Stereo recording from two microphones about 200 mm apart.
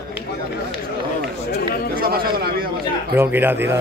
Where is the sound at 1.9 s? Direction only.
45° right (ahead or behind).